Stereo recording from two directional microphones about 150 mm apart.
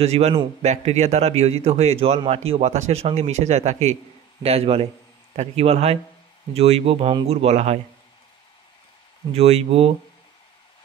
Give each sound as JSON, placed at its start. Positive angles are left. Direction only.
{"t": 0.0, "sound": "speech", "side_deg": -45}
{"t": 9.3, "sound": "speech", "side_deg": -45}